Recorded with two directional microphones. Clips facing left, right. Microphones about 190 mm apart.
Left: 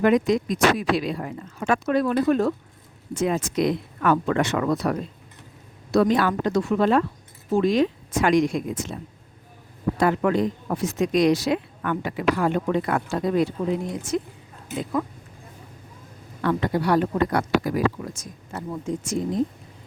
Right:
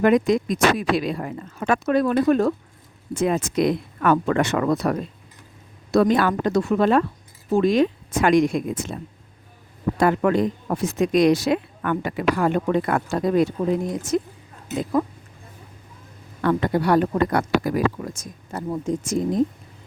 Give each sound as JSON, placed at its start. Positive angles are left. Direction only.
{"t": 0.0, "sound": "speech", "side_deg": -50}
{"t": 10.0, "sound": "speech", "side_deg": -50}
{"t": 16.4, "sound": "speech", "side_deg": -50}